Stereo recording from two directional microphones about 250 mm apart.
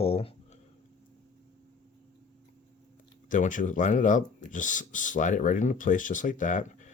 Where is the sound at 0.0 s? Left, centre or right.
Left.